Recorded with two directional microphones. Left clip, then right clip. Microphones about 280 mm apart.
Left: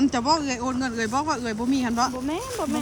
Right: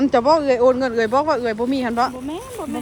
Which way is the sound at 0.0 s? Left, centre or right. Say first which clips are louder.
Right 7 dB; centre.